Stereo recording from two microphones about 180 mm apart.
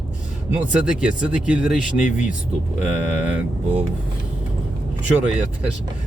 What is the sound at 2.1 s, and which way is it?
Speech, 45° left (ahead or behind).